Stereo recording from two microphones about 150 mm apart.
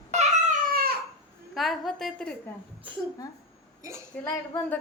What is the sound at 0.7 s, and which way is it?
Crying, 90° right.